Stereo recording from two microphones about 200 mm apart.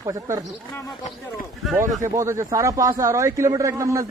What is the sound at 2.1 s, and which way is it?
A man's voice, 15° right (ahead or behind).